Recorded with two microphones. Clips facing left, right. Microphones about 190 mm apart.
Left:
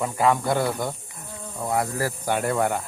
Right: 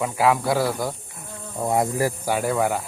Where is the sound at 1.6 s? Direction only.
20° right (ahead or behind).